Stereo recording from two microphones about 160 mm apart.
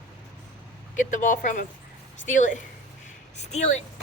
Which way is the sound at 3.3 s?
45° left (ahead or behind).